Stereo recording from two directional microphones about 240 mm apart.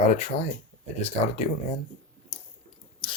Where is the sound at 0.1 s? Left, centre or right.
Left.